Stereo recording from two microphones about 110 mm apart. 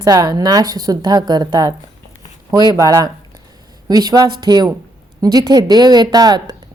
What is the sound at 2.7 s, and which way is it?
Speech, 35° right (ahead or behind).